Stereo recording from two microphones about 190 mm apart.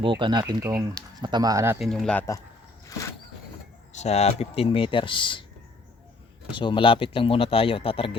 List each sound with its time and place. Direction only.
0.2 s speech: 25° right (ahead or behind)
1.8 s speech: centre (ahead or behind)
2.9 s a sound: 20° left (ahead or behind)
3.9 s speech: 35° left (ahead or behind)
6.5 s speech: 25° left (ahead or behind)